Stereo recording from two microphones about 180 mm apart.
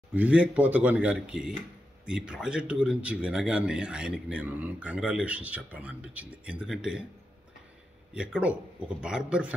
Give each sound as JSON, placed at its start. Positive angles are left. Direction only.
{"t": 0.1, "sound": "a man's voice", "side_deg": -10}
{"t": 8.1, "sound": "a man's voice", "side_deg": -5}